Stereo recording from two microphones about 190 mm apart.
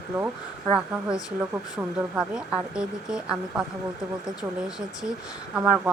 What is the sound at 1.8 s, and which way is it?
A woman's voice, 5° right (ahead or behind).